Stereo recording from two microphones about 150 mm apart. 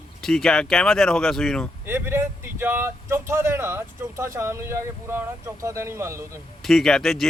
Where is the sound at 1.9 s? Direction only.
15° right (ahead or behind).